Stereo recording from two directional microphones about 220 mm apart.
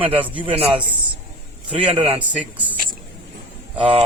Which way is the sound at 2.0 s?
25° right (ahead or behind).